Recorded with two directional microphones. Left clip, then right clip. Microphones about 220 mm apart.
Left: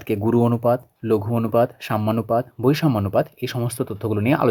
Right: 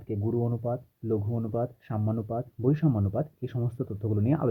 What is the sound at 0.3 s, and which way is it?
Speech, 40° left (ahead or behind).